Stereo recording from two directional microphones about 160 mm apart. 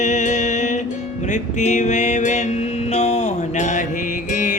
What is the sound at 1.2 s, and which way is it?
Music, 50° left (ahead or behind).